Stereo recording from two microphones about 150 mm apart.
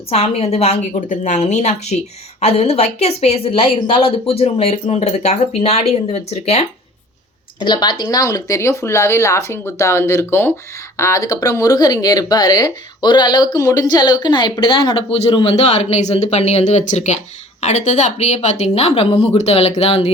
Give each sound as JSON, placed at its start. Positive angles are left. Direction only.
{"t": 0.1, "sound": "a woman's voice", "side_deg": 40}
{"t": 7.6, "sound": "a woman's voice", "side_deg": 30}